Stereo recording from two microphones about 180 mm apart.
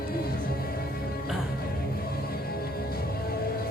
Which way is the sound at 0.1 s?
55° left (ahead or behind).